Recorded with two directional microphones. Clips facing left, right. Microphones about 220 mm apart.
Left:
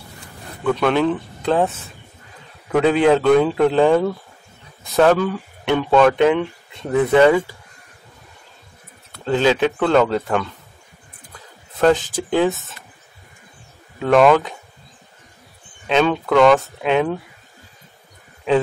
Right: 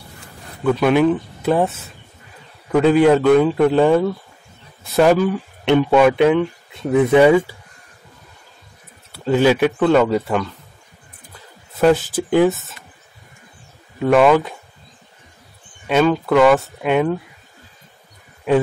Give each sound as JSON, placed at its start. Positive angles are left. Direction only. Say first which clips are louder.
{"t": 0.7, "sound": "speech", "louder": "right 3 dB", "side_deg": -10}
{"t": 2.7, "sound": "a man's voice", "louder": "right 2 dB", "side_deg": -5}
{"t": 9.1, "sound": "speech", "louder": "right 2 dB", "side_deg": -10}
{"t": 12.3, "sound": "speech", "louder": "right 3 dB", "side_deg": -10}
{"t": 13.9, "sound": "a man's voice", "louder": "even", "side_deg": -5}
{"t": 15.9, "sound": "a man's voice", "louder": "right 2 dB", "side_deg": -5}